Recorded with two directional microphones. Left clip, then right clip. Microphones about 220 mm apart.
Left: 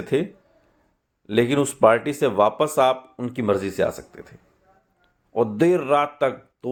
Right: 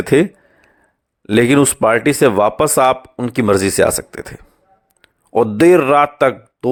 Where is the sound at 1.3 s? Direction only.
45° right (ahead or behind).